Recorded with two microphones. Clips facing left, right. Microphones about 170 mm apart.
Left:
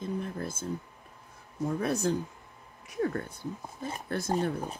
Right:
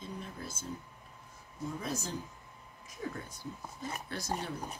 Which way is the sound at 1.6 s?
65° left (ahead or behind).